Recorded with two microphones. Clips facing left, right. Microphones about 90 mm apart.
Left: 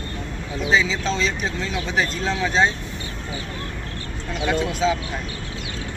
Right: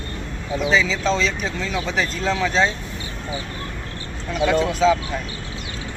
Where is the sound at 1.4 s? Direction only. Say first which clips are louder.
Right 1 dB; 5° left (ahead or behind).